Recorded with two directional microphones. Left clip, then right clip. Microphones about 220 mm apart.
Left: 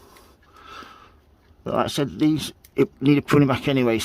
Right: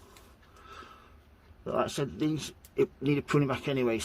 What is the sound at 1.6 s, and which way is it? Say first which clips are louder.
Speech: left 7 dB; 50° left (ahead or behind).